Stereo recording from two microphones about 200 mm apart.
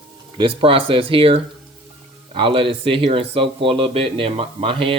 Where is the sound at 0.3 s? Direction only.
25° right (ahead or behind).